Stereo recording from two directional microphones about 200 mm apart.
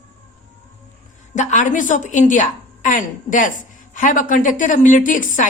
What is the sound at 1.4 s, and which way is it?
A woman's voice, 35° left (ahead or behind).